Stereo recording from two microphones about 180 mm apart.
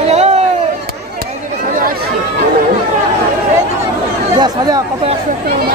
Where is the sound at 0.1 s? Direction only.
35° right (ahead or behind).